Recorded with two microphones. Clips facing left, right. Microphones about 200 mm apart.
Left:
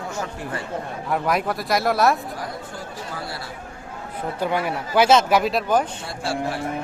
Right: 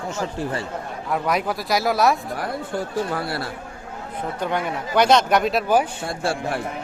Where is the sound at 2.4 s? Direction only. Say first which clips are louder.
Right 6 dB; 65° right (ahead or behind).